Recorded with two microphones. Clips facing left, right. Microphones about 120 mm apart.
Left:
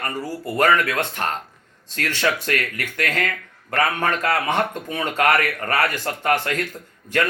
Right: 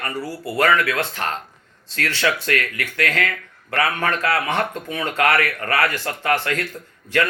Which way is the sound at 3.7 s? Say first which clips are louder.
Even; 40° left (ahead or behind).